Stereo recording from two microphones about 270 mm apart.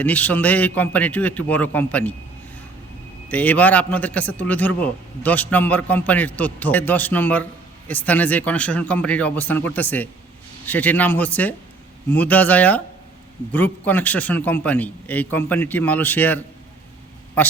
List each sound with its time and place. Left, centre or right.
0.0 s a man's voice: centre
3.2 s a man's voice: centre